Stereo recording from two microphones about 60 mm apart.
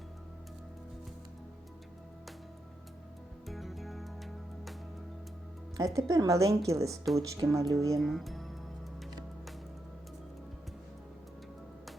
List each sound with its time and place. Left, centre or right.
3.4 s music: centre
5.7 s speech: right
8.0 s speech: centre